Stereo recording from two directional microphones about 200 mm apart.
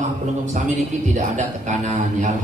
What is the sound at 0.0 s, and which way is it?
A man's voice, 35° right (ahead or behind).